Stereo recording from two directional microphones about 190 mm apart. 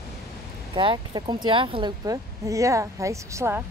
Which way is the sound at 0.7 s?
25° right (ahead or behind).